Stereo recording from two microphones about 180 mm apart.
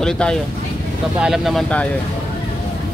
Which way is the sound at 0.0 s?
5° left (ahead or behind).